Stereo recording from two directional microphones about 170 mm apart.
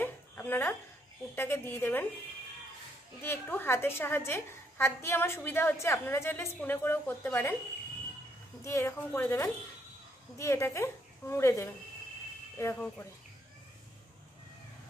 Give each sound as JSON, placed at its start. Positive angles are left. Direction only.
{"t": 0.0, "sound": "laughter", "side_deg": 10}
{"t": 1.3, "sound": "a woman's voice", "side_deg": 15}
{"t": 3.2, "sound": "a woman's voice", "side_deg": 10}
{"t": 8.6, "sound": "a woman's voice", "side_deg": 15}
{"t": 12.7, "sound": "a woman's voice", "side_deg": 5}